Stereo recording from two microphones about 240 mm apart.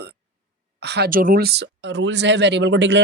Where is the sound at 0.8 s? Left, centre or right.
Right.